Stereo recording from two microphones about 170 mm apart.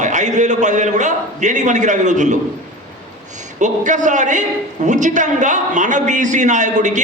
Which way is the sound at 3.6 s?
45° right (ahead or behind).